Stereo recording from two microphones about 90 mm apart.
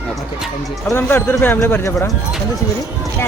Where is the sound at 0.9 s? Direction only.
20° left (ahead or behind).